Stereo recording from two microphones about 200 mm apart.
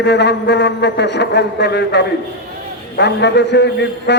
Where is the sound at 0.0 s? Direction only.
60° left (ahead or behind).